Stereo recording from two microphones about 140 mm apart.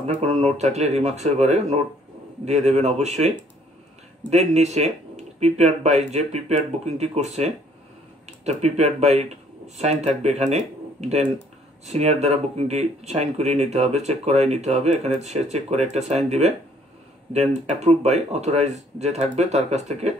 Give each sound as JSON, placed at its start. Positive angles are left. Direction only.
{"t": 0.0, "sound": "speech", "side_deg": -50}